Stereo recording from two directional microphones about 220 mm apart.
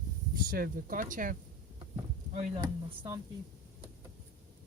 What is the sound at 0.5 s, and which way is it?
Speech, 40° right (ahead or behind).